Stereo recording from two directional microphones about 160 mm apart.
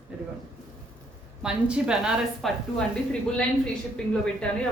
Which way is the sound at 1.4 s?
5° right (ahead or behind).